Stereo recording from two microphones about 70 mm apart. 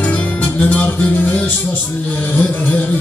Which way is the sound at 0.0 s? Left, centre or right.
Left.